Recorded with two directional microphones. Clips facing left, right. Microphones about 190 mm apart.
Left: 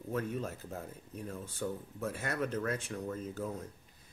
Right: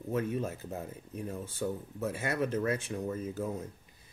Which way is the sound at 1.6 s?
25° right (ahead or behind).